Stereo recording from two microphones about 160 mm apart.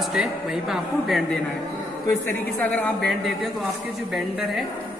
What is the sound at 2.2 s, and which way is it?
A woman's voice, 10° left (ahead or behind).